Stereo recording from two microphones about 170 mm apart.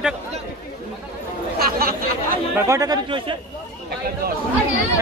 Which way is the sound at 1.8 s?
55° right (ahead or behind).